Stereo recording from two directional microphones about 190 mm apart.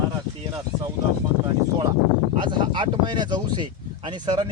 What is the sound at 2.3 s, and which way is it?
Speech, 25° right (ahead or behind).